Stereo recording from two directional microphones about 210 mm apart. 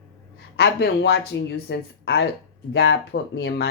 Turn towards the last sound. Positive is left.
turn(degrees=50)  # may be behind; listen again after turning